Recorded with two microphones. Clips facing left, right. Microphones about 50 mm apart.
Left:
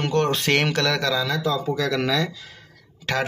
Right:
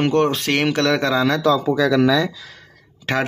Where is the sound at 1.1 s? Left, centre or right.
Right.